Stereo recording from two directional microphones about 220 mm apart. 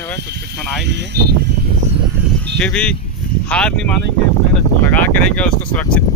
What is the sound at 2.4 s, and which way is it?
Sheep, 5° left (ahead or behind).